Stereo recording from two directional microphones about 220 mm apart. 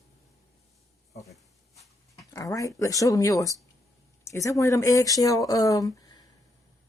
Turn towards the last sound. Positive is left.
turn(degrees=15)  # may be behind; listen again after turning